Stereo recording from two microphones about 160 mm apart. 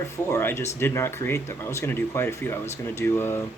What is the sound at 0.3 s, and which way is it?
Speech, 15° left (ahead or behind).